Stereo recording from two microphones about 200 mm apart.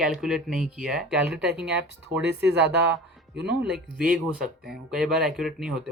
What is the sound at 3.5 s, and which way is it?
Speech, 5° right (ahead or behind).